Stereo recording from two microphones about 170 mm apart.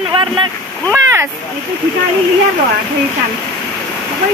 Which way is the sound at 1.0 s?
15° right (ahead or behind).